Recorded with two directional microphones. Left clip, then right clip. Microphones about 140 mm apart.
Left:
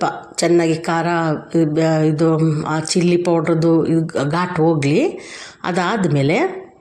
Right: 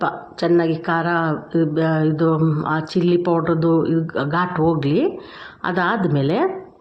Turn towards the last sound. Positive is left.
turn(degrees=15)  # may be behind; listen again after turning